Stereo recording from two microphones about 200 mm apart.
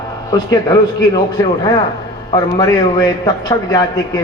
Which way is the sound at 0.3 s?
20° left (ahead or behind).